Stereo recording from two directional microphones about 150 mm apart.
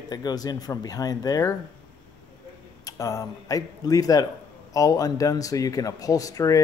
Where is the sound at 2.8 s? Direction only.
20° left (ahead or behind).